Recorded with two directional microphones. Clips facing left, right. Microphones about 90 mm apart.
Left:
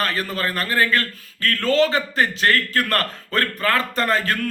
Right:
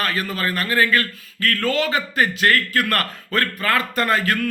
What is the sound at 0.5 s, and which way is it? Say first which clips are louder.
A man's voice: right 1 dB; 35° left (ahead or behind).